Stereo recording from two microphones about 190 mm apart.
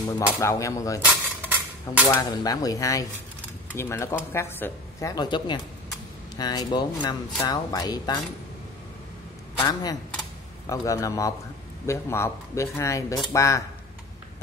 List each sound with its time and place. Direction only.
0.4 s speech: 15° left (ahead or behind)
1.0 s cutlery: 10° right (ahead or behind)
2.0 s speech: 20° left (ahead or behind)
9.6 s speech: 20° left (ahead or behind)